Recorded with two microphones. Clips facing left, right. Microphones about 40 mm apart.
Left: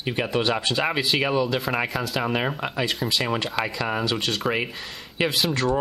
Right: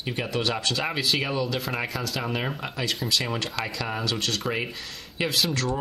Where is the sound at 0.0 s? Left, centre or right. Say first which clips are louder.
Left 4 dB; centre.